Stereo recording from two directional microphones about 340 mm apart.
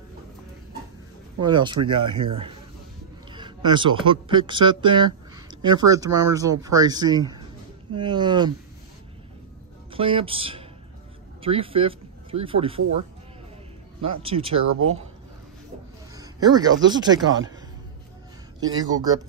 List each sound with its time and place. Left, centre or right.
1.4 s speech: centre
3.3 s speech: centre
9.9 s speech: centre
14.0 s speech: centre
16.2 s a sound: centre
16.9 s speech: centre
18.6 s speech: centre